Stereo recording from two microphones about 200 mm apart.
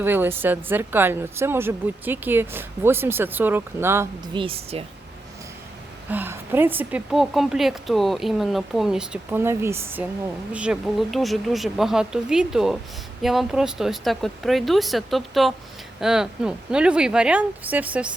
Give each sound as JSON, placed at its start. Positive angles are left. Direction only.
{"t": 0.0, "sound": "a woman's voice", "side_deg": -10}
{"t": 4.4, "sound": "speech", "side_deg": -30}
{"t": 6.1, "sound": "a woman's voice", "side_deg": -10}